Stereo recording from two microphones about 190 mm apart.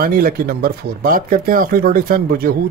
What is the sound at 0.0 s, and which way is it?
Speech, 50° right (ahead or behind).